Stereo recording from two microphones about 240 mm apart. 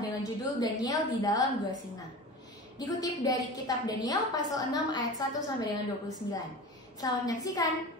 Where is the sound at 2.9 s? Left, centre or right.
Centre.